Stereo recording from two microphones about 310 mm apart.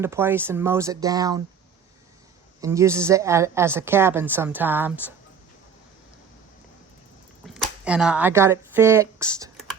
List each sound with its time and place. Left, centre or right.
0.0 s a woman's voice: centre
2.6 s a woman's voice: centre
7.4 s speech: centre